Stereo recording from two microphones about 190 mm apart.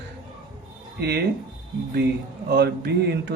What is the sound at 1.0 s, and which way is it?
Speech, 55° right (ahead or behind).